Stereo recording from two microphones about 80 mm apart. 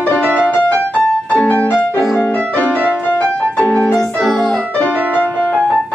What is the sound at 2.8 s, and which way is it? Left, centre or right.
Music, centre.